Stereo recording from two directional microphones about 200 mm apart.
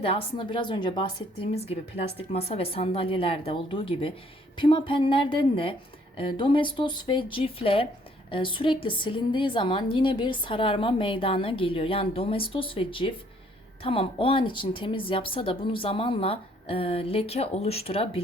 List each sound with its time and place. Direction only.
0.0 s a woman's voice: 30° left (ahead or behind)